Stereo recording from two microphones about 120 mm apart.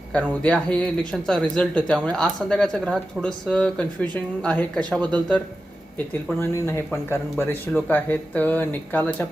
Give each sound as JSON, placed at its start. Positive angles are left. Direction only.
{"t": 0.1, "sound": "speech", "side_deg": 10}
{"t": 6.4, "sound": "speech", "side_deg": 20}